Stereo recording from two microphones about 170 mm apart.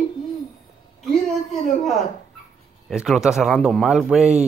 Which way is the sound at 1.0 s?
Centre (ahead or behind).